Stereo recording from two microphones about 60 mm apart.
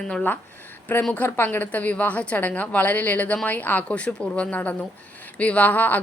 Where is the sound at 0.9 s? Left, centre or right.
Left.